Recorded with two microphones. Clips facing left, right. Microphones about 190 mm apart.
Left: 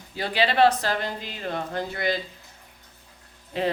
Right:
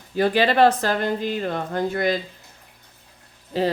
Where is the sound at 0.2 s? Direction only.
45° right (ahead or behind).